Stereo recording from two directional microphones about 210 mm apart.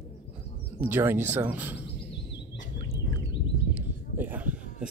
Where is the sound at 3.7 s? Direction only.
10° right (ahead or behind).